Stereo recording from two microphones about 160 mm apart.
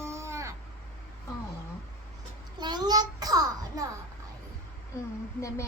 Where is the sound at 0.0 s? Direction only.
15° right (ahead or behind).